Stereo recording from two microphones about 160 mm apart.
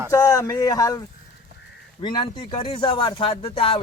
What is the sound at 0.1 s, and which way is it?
Speech, 20° left (ahead or behind).